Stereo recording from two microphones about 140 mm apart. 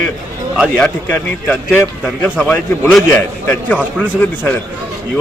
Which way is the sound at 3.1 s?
15° left (ahead or behind).